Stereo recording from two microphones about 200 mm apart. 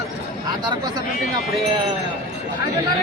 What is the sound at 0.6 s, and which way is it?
Speech, 20° right (ahead or behind).